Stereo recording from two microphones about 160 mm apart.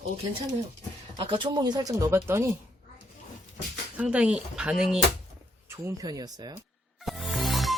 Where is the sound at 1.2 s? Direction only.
30° right (ahead or behind); by 2.5 s 15° right (ahead or behind).